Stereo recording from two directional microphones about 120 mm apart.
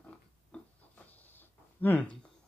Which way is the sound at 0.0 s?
15° left (ahead or behind).